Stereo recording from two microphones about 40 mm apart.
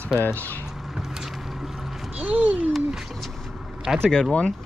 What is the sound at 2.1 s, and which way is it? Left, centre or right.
Speech, right.